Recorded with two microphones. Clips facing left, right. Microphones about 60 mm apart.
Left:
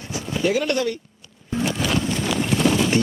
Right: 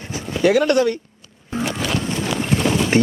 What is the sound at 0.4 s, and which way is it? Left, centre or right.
Speech, right.